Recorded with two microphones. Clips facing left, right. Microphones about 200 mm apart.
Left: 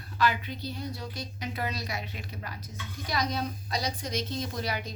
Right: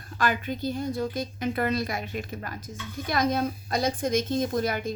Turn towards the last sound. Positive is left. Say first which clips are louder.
# right 7 dB
turn(degrees=-50)  # may be behind; listen again after turning